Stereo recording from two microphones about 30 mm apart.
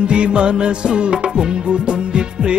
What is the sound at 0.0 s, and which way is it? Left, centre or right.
Music, right.